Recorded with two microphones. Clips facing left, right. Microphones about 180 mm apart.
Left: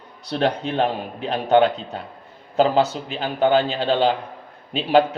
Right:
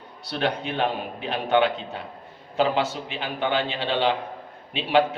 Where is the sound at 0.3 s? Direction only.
40° left (ahead or behind).